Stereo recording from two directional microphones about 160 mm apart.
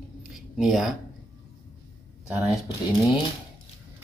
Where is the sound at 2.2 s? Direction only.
10° right (ahead or behind).